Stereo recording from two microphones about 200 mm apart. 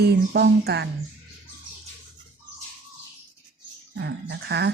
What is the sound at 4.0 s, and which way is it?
Speech, 55° right (ahead or behind).